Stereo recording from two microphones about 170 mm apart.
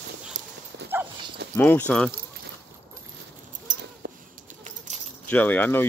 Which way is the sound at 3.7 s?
50° right (ahead or behind).